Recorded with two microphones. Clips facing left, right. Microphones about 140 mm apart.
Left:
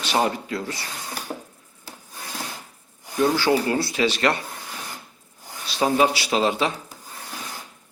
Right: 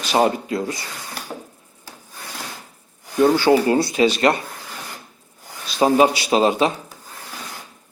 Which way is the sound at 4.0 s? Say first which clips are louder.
Right 3 dB; 30° right (ahead or behind).